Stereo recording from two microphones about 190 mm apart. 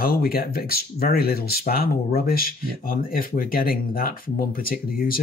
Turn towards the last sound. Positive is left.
turn(degrees=50)  # may be behind; listen again after turning